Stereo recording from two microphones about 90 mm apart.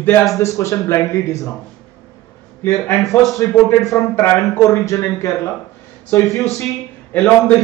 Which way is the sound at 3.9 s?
30° left (ahead or behind).